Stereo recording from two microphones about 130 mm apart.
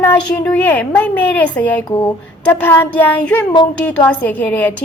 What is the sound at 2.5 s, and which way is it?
A woman's voice, 15° left (ahead or behind).